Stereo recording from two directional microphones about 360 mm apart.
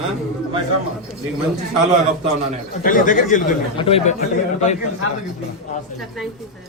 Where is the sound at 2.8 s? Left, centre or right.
Left.